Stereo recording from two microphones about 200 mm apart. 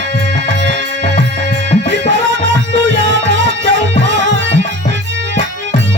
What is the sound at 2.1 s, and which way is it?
Music, 60° right (ahead or behind).